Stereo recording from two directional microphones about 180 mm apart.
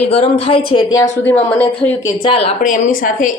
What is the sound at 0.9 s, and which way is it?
Speech, 20° left (ahead or behind).